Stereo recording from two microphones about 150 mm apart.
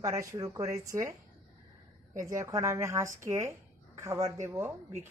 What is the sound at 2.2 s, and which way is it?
A woman's voice, 20° right (ahead or behind).